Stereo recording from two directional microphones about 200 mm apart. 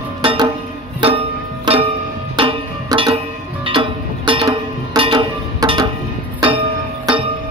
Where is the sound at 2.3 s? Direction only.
25° right (ahead or behind).